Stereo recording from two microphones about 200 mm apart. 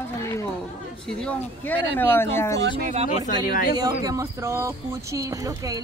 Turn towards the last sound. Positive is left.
turn(degrees=-15)  # may be behind; listen again after turning